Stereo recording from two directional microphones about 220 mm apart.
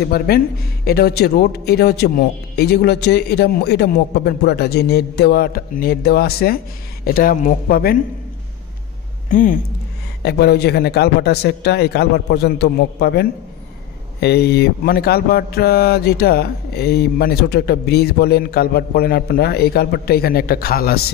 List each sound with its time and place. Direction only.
0.0 s speech: 45° left (ahead or behind)
9.3 s speech: 40° left (ahead or behind)